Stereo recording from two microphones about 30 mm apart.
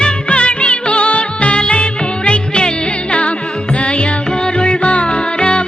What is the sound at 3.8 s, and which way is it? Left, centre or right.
Music, left.